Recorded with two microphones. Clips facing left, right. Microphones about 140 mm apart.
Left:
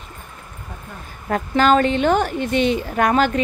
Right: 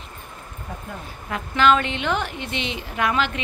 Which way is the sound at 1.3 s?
40° left (ahead or behind).